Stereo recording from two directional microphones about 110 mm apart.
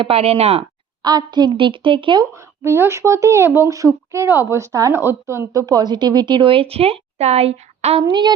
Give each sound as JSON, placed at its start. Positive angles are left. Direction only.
{"t": 0.0, "sound": "speech", "side_deg": -60}
{"t": 1.0, "sound": "a woman's voice", "side_deg": -40}
{"t": 2.6, "sound": "speech", "side_deg": -25}
{"t": 8.0, "sound": "a woman's voice", "side_deg": -45}